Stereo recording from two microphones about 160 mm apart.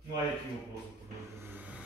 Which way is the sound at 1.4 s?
10° right (ahead or behind).